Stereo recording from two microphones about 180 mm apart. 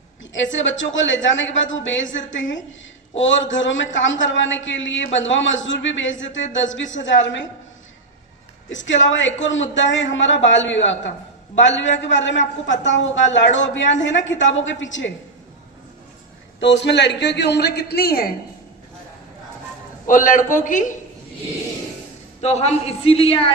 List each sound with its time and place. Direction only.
0.5 s a man's voice: 90° left
8.7 s a man's voice: 90° left
16.6 s a woman's voice: 80° left; by 18.3 s 55° left (ahead or behind)
20.1 s a man's voice: 45° left (ahead or behind)
22.4 s speech: 35° left (ahead or behind)